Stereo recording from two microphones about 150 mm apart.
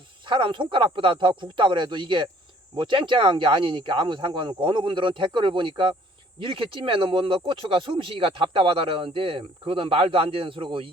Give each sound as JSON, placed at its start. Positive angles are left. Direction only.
{"t": 0.3, "sound": "speech", "side_deg": -35}